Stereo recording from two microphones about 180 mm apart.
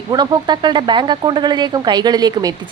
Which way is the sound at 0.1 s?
25° right (ahead or behind).